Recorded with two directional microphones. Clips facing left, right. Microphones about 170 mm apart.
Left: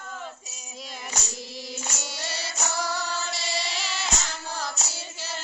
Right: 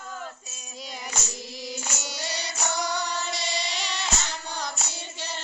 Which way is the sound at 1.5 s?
Centre (ahead or behind).